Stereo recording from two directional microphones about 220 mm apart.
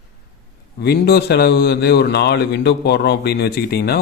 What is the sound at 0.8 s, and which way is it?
A man's voice, 45° left (ahead or behind).